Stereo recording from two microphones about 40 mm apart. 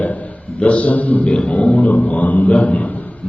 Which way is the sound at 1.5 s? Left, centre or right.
Left.